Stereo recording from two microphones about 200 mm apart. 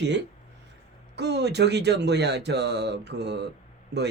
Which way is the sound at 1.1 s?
60° right (ahead or behind).